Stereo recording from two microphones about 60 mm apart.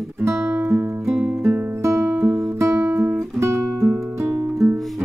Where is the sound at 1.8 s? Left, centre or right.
Right.